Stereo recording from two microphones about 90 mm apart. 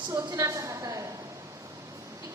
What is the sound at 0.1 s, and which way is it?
Speech, 40° right (ahead or behind).